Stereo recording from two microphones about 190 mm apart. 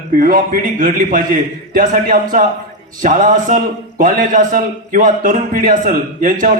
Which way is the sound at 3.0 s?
45° right (ahead or behind).